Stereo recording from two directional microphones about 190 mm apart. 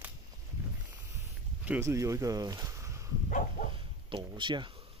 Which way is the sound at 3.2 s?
45° left (ahead or behind).